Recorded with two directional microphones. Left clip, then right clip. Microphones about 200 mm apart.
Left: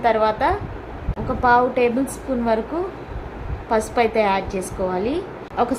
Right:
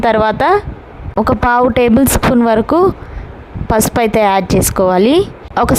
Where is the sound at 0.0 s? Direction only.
55° right (ahead or behind).